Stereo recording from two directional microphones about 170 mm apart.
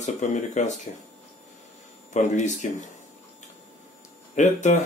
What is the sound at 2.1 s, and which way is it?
Speech, 45° left (ahead or behind).